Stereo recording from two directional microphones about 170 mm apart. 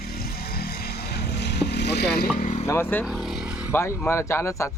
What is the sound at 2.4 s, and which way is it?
Speech, 45° left (ahead or behind).